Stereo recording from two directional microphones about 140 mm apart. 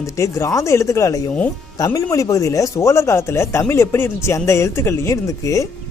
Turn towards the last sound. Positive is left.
turn(degrees=20)  # may be behind; listen again after turning